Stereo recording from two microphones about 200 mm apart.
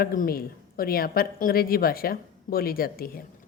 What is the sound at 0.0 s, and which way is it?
Speech, 45° left (ahead or behind).